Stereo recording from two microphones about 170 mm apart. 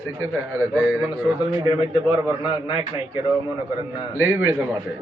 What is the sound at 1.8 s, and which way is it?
A man's voice, 30° left (ahead or behind).